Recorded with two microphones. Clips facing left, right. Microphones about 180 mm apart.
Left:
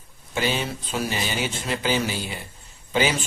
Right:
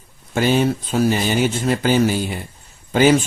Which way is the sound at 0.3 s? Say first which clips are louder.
Right 9 dB; 45° right (ahead or behind).